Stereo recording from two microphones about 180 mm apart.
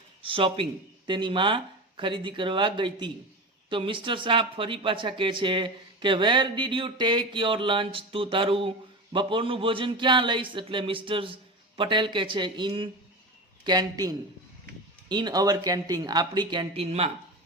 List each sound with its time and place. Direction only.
0.2 s speech: 30° right (ahead or behind)